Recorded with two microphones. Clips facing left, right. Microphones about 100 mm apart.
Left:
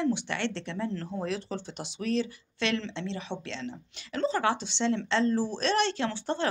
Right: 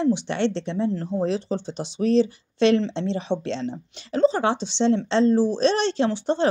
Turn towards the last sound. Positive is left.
turn(degrees=-20)  # may be behind; listen again after turning